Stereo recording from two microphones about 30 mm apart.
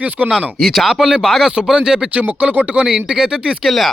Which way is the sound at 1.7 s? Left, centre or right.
Right.